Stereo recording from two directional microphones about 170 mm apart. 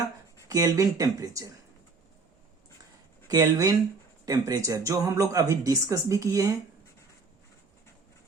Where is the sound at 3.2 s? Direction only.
20° right (ahead or behind).